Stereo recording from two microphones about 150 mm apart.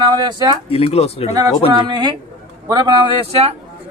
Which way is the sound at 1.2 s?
20° right (ahead or behind).